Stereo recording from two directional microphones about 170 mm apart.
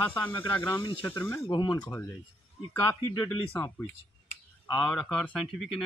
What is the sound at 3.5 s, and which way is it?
Speech, 10° left (ahead or behind).